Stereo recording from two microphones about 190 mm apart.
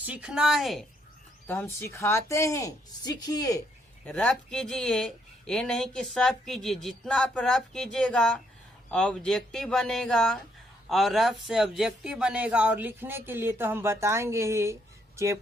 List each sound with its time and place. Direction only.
0.0 s speech: 5° right (ahead or behind)
1.5 s a woman's voice: 10° left (ahead or behind)
4.0 s speech: 5° left (ahead or behind); by 15.4 s 15° right (ahead or behind)